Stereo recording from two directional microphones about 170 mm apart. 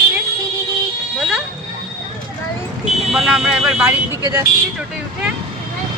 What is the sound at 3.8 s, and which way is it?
Speech, 20° right (ahead or behind).